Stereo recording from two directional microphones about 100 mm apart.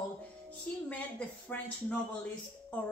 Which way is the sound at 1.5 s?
15° left (ahead or behind).